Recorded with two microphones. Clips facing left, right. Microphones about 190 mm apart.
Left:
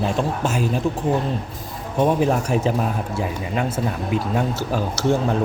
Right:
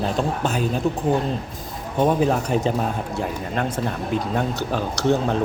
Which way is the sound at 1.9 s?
Centre (ahead or behind).